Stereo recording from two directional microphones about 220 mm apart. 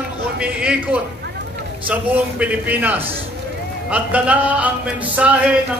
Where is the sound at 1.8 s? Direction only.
5° right (ahead or behind).